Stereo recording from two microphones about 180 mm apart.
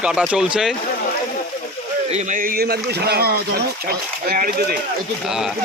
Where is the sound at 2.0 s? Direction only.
40° right (ahead or behind).